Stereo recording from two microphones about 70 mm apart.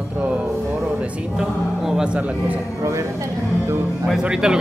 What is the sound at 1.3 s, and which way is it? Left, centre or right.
Speech, centre.